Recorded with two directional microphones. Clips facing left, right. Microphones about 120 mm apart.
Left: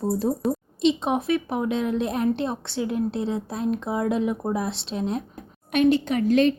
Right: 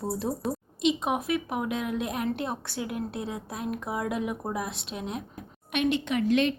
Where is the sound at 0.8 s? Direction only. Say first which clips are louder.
Left 5 dB; 30° left (ahead or behind).